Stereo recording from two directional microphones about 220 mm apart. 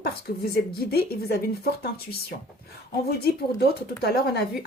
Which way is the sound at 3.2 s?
45° left (ahead or behind).